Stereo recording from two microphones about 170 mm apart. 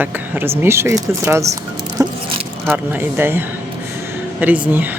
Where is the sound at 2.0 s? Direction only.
20° right (ahead or behind).